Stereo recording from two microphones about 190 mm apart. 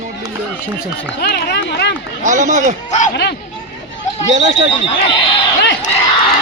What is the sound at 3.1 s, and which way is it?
Speech, 65° left (ahead or behind).